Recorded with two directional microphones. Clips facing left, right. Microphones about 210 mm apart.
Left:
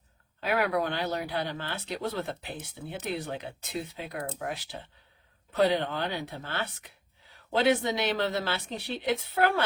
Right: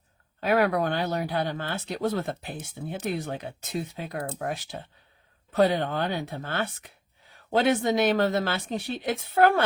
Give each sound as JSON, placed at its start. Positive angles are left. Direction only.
{"t": 0.3, "sound": "speech", "side_deg": -45}